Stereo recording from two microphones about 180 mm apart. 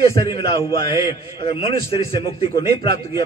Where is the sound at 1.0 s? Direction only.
30° left (ahead or behind).